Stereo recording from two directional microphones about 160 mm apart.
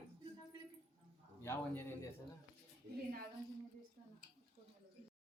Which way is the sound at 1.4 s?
15° left (ahead or behind).